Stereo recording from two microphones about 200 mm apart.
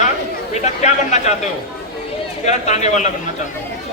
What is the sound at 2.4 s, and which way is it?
Speech, 35° left (ahead or behind).